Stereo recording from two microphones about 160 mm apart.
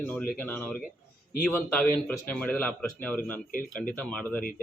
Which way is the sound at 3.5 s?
60° left (ahead or behind).